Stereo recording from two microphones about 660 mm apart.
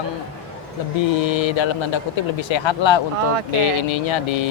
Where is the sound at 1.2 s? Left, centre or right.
Left.